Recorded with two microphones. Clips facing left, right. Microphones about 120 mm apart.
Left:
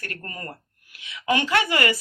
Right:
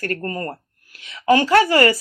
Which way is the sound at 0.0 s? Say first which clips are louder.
Right 11 dB; 40° right (ahead or behind).